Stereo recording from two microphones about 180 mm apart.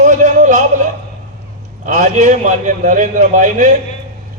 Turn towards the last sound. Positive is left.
turn(degrees=-45)  # may be behind; listen again after turning